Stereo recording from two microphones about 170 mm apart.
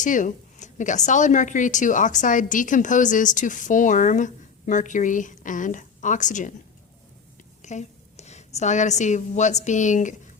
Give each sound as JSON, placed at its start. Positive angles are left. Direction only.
{"t": 0.0, "sound": "a woman's voice", "side_deg": 50}
{"t": 7.6, "sound": "a woman's voice", "side_deg": 45}